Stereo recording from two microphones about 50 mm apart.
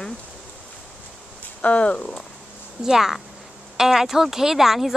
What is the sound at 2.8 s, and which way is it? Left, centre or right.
A woman's voice, centre.